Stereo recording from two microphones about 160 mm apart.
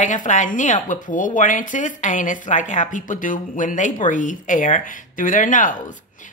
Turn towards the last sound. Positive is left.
turn(degrees=55)  # may be behind; listen again after turning